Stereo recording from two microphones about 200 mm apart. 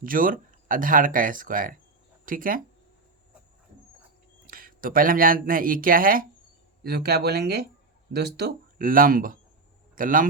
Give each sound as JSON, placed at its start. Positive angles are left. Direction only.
{"t": 0.0, "sound": "speech", "side_deg": -45}
{"t": 4.4, "sound": "a man's voice", "side_deg": -45}